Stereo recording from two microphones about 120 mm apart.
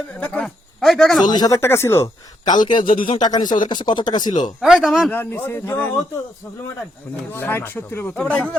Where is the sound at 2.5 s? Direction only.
40° left (ahead or behind).